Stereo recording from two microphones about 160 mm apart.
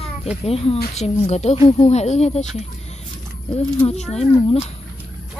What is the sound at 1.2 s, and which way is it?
Speech, 40° left (ahead or behind).